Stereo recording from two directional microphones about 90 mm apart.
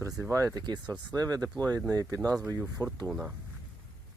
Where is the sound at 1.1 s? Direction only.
45° right (ahead or behind).